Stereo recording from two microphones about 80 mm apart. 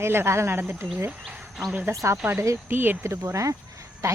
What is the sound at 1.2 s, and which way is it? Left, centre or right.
Insect, centre.